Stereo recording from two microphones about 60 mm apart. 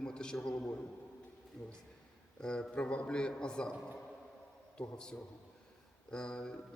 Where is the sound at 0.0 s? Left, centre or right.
Centre.